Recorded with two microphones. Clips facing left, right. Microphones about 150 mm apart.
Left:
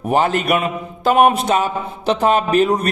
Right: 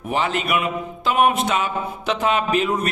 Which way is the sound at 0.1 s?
45° left (ahead or behind).